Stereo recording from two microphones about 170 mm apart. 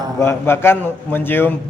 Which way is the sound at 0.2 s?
15° left (ahead or behind).